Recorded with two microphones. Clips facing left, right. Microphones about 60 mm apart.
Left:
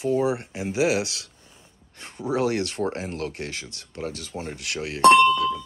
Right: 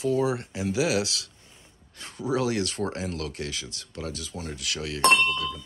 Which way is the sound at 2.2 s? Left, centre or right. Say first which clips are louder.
Left 2 dB; left.